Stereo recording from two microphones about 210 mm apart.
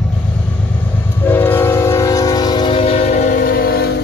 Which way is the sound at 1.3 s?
10° left (ahead or behind).